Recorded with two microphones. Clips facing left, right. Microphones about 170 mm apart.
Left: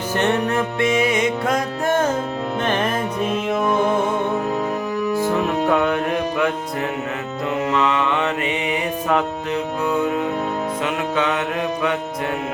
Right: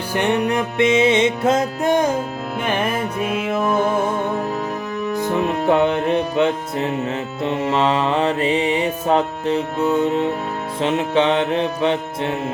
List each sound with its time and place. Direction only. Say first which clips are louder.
0.1 s music: right 1 dB; 10° right (ahead or behind)
5.1 s music: right 1 dB; 20° right (ahead or behind)
7.4 s mantra: right 1 dB; 30° right (ahead or behind)